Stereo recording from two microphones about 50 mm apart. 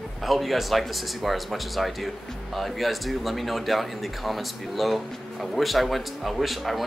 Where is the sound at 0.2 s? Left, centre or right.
Centre.